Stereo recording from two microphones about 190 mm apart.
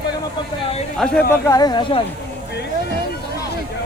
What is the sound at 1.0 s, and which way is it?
Speech, 15° left (ahead or behind).